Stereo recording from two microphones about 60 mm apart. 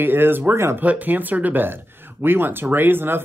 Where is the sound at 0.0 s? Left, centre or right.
Right.